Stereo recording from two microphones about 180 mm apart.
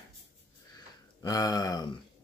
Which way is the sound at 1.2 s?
20° left (ahead or behind).